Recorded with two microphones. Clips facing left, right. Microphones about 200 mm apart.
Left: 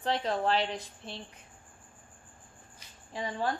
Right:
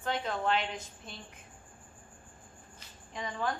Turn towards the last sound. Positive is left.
turn(degrees=30)  # may be behind; listen again after turning